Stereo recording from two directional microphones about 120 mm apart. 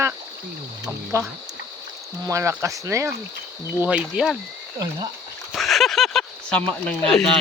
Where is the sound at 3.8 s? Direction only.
10° right (ahead or behind).